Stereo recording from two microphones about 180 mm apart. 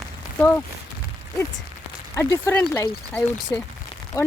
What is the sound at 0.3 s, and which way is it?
Speech, 10° left (ahead or behind).